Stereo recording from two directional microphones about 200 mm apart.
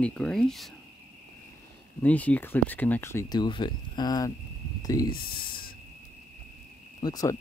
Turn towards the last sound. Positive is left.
turn(degrees=20)  # may be behind; listen again after turning